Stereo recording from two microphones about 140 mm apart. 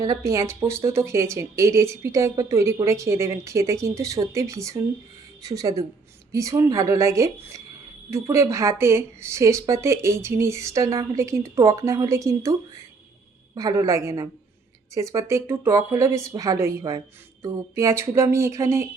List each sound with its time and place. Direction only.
0.0 s a woman's voice: 25° right (ahead or behind)